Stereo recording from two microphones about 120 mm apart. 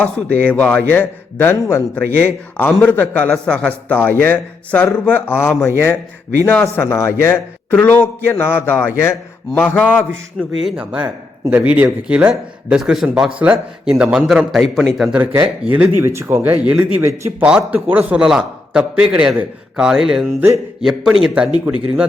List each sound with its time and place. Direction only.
0.0 s a man's voice: 10° left (ahead or behind)
2.1 s a man's voice: 10° left (ahead or behind)
10.6 s a man's voice: centre (ahead or behind)
11.5 s a man's voice: 15° right (ahead or behind)
15.1 s a man's voice: 15° right (ahead or behind)